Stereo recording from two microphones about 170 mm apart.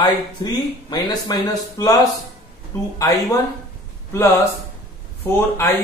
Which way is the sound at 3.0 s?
20° left (ahead or behind).